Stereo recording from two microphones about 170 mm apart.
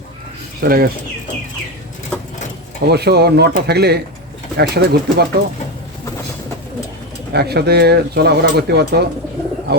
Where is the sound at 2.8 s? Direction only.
75° right (ahead or behind).